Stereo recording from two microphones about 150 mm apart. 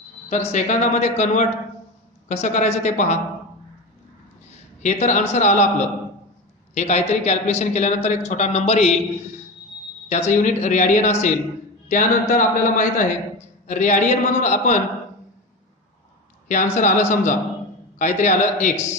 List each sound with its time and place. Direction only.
0.3 s a man's voice: 50° left (ahead or behind)
4.5 s a man's voice: 50° left (ahead or behind)
10.0 s a man's voice: 50° left (ahead or behind)
16.4 s a man's voice: 55° left (ahead or behind)